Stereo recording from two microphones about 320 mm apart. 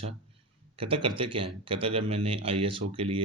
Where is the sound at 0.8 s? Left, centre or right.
Centre.